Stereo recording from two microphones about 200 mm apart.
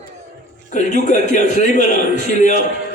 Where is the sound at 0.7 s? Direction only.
35° left (ahead or behind).